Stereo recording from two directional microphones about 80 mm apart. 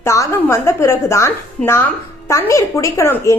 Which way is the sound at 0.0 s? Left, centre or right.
Left.